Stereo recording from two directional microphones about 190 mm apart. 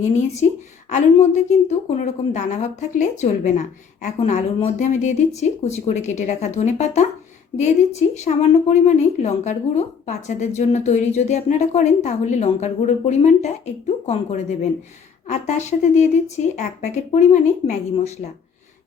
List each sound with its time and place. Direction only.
0.9 s a woman's voice: 35° left (ahead or behind)